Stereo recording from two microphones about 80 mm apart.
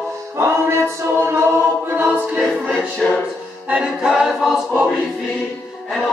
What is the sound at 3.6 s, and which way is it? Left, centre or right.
A capella, centre.